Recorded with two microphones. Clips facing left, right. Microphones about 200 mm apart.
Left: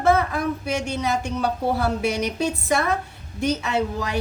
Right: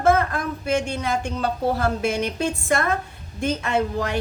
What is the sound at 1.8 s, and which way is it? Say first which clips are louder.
A woman's voice: even; 10° left (ahead or behind).